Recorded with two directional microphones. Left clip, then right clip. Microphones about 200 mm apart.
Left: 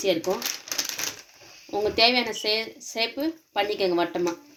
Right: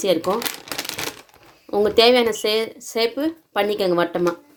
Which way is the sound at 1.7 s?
50° right (ahead or behind).